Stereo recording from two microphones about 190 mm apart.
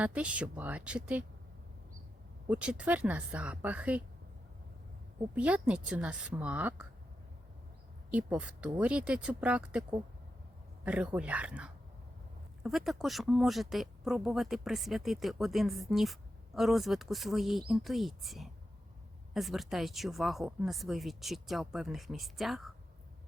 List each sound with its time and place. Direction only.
0.0 s speech: 5° right (ahead or behind)
2.5 s speech: 5° right (ahead or behind)
5.3 s speech: 5° right (ahead or behind)
8.1 s speech: 5° right (ahead or behind)